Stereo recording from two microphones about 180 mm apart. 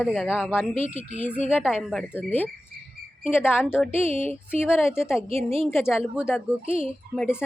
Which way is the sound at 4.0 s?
35° right (ahead or behind).